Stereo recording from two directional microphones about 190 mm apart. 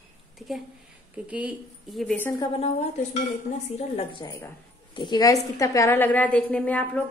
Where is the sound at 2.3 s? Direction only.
25° left (ahead or behind).